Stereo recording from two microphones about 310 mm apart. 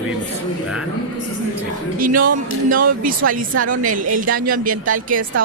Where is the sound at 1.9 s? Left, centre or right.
Right.